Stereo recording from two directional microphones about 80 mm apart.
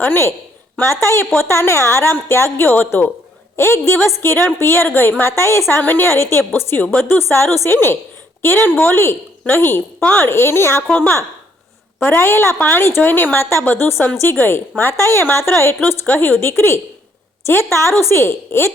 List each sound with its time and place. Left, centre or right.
0.0 s a woman's voice: left
10.0 s a woman's voice: centre
10.2 s a woman's voice: left
11.9 s a woman's voice: left